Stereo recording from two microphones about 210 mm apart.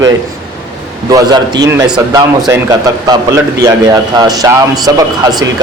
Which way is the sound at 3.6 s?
15° right (ahead or behind).